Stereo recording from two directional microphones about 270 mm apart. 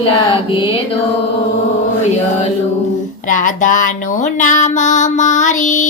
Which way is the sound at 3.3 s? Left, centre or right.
Left.